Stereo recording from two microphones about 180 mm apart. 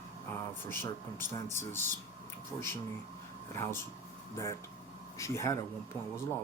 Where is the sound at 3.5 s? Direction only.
15° left (ahead or behind).